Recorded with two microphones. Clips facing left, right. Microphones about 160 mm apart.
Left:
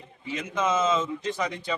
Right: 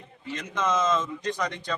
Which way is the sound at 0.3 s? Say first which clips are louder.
Left 1 dB; 10° left (ahead or behind).